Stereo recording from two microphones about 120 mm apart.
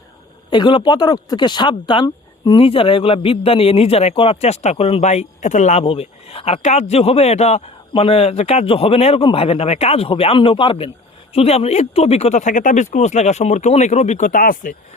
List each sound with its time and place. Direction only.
0.5 s speech: 40° left (ahead or behind)
2.0 s a sound: 35° left (ahead or behind)
2.6 s speech: 50° left (ahead or behind); by 5.8 s 85° left
5.8 s speech: 55° left (ahead or behind); by 14.7 s 90° left